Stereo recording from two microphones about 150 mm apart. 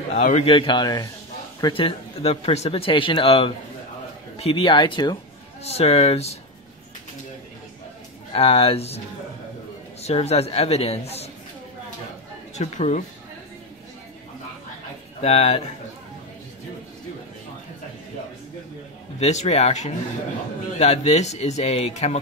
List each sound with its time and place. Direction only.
0.1 s a man's voice: 55° left (ahead or behind)
0.5 s speech: 35° left (ahead or behind)
5.6 s speech: 45° left (ahead or behind)
8.3 s speech: 40° left (ahead or behind)
10.0 s speech: 45° left (ahead or behind)
12.5 s speech: 50° left (ahead or behind)
15.2 s speech: 45° left (ahead or behind)
19.1 s speech: 50° left (ahead or behind)